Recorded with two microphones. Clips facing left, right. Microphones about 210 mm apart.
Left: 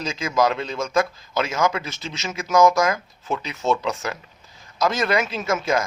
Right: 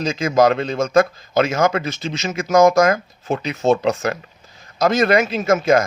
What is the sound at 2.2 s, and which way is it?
Speech, 45° right (ahead or behind).